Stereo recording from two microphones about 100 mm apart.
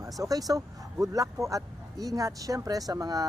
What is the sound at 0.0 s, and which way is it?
Speech, 35° right (ahead or behind).